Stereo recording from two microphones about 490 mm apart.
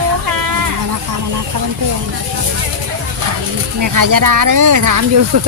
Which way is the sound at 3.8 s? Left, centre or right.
Right.